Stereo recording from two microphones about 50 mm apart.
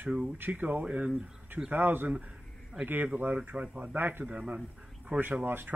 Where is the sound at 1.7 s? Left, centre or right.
Right.